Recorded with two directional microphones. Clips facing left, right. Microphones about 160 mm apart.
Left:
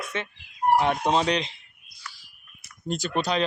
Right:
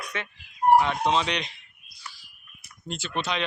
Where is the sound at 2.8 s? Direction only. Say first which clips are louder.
Left 4 dB; 40° left (ahead or behind).